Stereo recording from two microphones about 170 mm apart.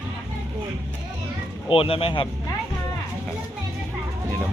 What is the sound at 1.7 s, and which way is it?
Speech, 30° left (ahead or behind).